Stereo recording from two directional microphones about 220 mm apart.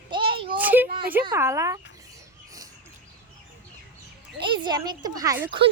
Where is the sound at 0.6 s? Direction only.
10° right (ahead or behind).